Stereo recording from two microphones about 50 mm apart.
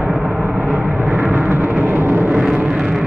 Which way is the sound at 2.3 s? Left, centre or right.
Centre.